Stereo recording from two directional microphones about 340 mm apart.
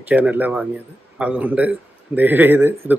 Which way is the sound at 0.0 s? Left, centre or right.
Centre.